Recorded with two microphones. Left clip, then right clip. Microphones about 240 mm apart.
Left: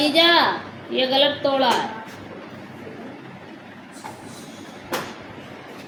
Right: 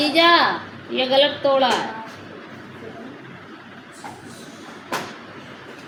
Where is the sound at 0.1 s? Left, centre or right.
Centre.